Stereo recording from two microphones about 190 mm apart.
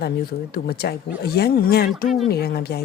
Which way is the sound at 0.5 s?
55° left (ahead or behind).